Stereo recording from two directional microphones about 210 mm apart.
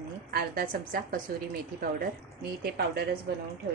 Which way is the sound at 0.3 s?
45° right (ahead or behind).